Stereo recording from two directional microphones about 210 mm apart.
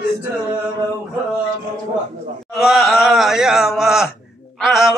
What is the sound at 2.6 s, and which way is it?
Speech, centre (ahead or behind).